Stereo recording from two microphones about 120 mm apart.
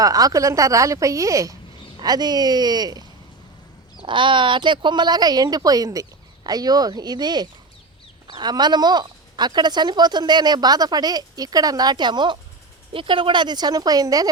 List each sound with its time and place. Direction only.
0.0 s speech: 30° right (ahead or behind)
4.0 s speech: 45° right (ahead or behind)